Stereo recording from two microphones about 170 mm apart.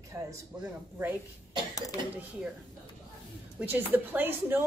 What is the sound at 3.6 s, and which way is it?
Speech, 10° right (ahead or behind).